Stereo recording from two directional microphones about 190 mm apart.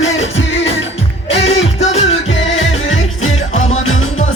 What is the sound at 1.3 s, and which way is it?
Music, 30° left (ahead or behind).